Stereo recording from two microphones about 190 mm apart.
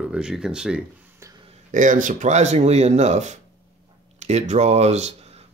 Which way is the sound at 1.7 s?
45° right (ahead or behind).